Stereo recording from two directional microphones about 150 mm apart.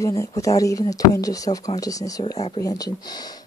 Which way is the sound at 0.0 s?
20° left (ahead or behind).